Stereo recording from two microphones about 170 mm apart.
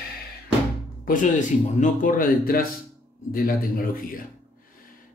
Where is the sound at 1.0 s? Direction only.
50° left (ahead or behind).